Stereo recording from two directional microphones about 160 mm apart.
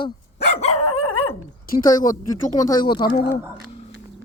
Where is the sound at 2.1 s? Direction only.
20° left (ahead or behind).